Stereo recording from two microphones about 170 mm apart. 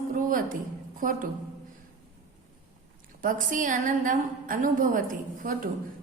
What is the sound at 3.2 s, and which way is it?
A woman's voice, 50° right (ahead or behind).